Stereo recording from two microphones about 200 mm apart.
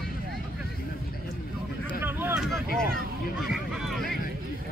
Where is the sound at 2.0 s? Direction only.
10° right (ahead or behind).